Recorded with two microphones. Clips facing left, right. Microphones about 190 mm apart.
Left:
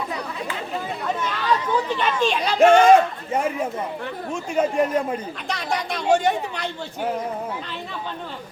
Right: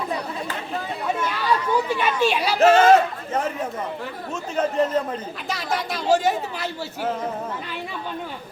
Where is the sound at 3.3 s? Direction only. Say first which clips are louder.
Left 2 dB; 10° left (ahead or behind).